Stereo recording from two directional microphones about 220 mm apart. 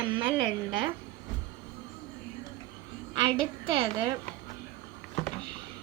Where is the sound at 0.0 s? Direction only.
20° right (ahead or behind).